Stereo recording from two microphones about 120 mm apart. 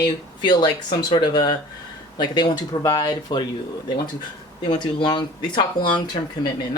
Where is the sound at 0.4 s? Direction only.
40° left (ahead or behind).